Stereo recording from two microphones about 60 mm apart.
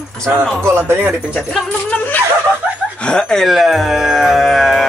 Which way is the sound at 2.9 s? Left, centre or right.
Centre.